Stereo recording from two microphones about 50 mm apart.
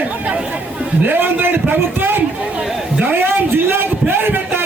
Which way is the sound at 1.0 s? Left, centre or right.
Right.